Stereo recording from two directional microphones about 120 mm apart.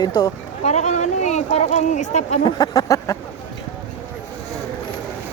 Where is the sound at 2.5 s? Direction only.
35° left (ahead or behind).